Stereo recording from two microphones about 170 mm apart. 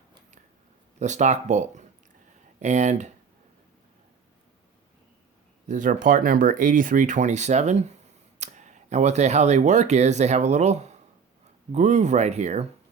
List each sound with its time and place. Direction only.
0.9 s speech: 45° right (ahead or behind)
5.6 s speech: 50° right (ahead or behind)